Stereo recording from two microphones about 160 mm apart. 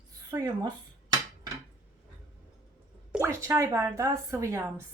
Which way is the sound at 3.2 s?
15° right (ahead or behind).